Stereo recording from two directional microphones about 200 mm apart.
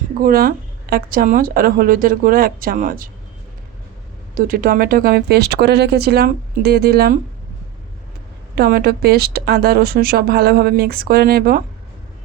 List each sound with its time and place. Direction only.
0.2 s speech: 45° right (ahead or behind)
4.4 s speech: 45° right (ahead or behind)
8.5 s speech: 50° right (ahead or behind)